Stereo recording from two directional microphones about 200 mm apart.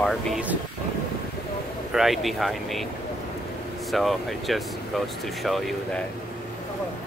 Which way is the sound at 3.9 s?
Centre (ahead or behind).